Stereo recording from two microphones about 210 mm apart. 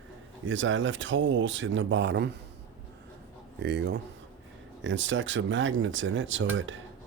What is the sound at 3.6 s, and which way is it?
Speech, 55° right (ahead or behind).